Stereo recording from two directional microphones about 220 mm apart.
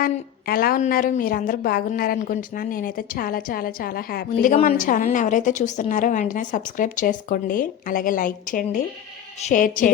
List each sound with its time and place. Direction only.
0.0 s a woman's voice: 40° left (ahead or behind)